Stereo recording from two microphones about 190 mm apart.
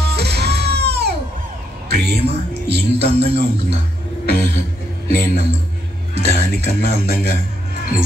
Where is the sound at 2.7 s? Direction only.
60° right (ahead or behind).